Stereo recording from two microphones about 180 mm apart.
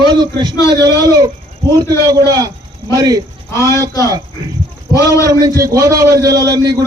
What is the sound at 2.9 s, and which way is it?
Speech, 20° right (ahead or behind).